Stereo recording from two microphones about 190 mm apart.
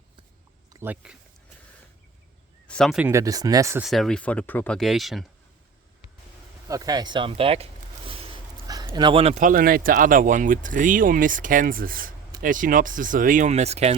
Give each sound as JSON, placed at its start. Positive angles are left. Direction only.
{"t": 0.7, "sound": "speech", "side_deg": -10}
{"t": 2.6, "sound": "speech", "side_deg": 5}
{"t": 3.1, "sound": "speech", "side_deg": -15}
{"t": 3.8, "sound": "speech", "side_deg": 0}
{"t": 6.7, "sound": "a man's voice", "side_deg": -20}